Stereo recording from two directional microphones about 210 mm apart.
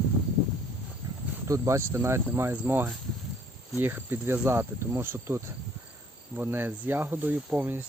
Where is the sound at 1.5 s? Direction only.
15° right (ahead or behind).